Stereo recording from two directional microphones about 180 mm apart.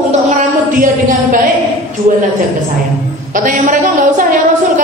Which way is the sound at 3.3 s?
45° right (ahead or behind).